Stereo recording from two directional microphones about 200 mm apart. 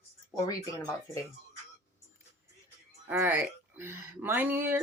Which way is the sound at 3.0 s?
10° right (ahead or behind).